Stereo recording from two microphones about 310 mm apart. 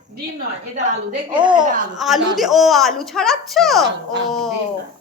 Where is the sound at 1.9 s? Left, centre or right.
Centre.